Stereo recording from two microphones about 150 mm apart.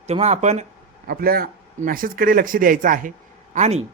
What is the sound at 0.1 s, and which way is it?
Speech, 45° right (ahead or behind).